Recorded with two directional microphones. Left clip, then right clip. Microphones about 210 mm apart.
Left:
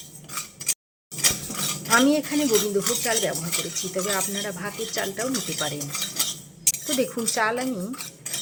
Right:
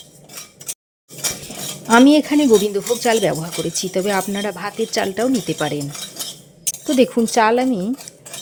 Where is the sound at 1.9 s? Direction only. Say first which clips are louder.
Right 8 dB; 40° right (ahead or behind).